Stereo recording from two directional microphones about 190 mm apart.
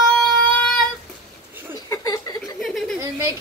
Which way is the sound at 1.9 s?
20° left (ahead or behind).